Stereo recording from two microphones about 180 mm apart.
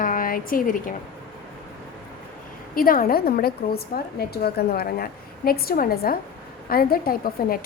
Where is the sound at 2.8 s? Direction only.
50° left (ahead or behind).